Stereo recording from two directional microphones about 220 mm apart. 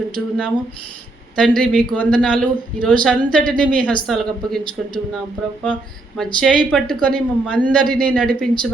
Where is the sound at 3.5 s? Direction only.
5° left (ahead or behind).